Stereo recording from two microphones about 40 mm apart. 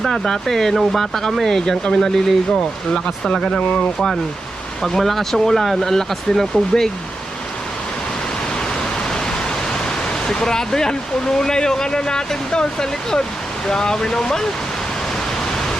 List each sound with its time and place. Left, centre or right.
0.0 s speech: centre
3.3 s speech: centre
3.7 s speech: left
3.9 s speech: centre
9.0 s pink noise: centre
10.2 s speech: centre